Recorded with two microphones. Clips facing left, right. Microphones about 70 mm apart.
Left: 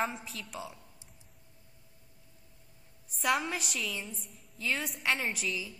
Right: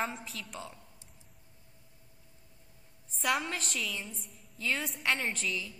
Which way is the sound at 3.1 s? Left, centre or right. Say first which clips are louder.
Left 1 dB; centre.